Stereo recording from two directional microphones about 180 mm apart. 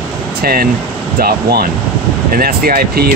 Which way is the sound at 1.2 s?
60° right (ahead or behind).